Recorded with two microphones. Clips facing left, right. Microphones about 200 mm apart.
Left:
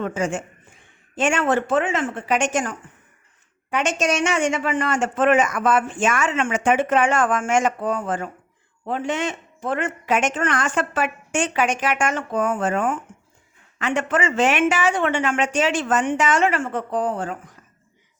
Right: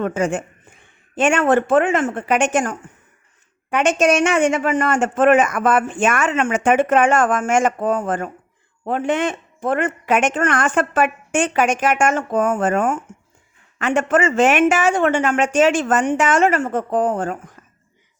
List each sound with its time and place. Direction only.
0.0 s speech: 55° right (ahead or behind)